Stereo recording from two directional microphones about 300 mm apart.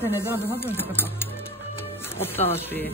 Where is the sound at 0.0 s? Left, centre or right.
Centre.